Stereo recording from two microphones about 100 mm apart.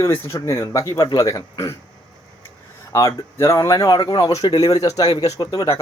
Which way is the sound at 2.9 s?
30° left (ahead or behind).